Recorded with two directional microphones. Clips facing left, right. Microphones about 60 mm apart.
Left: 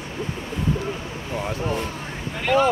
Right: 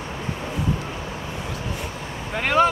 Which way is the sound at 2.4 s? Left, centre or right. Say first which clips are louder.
Right 1 dB; right.